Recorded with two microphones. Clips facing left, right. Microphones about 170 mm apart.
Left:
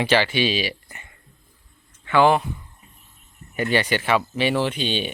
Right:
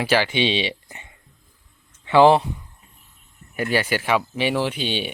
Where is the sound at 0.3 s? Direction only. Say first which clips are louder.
Right 1 dB; 25° right (ahead or behind).